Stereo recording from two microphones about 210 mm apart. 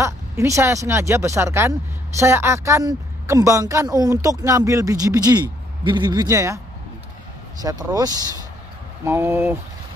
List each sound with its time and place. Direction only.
0.0 s speech: 15° right (ahead or behind)
7.6 s speech: 15° right (ahead or behind)